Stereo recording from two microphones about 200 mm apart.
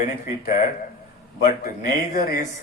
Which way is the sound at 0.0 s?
40° left (ahead or behind).